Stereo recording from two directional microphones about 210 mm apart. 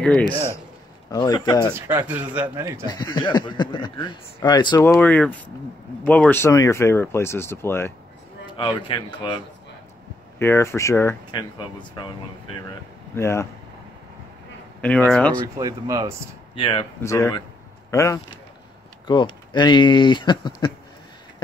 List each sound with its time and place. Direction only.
1.1 s speech: 20° left (ahead or behind)
1.6 s speech: 10° right (ahead or behind)
2.9 s speech: 20° left (ahead or behind)
4.8 s speech: 10° left (ahead or behind)
8.5 s speech: 25° left (ahead or behind)
10.4 s speech: 10° left (ahead or behind)
13.1 s speech: 15° left (ahead or behind)
14.8 s speech: 5° left (ahead or behind)
15.4 s speech: 15° right (ahead or behind)
16.5 s speech: 25° left (ahead or behind)
17.0 s speech: 15° left (ahead or behind)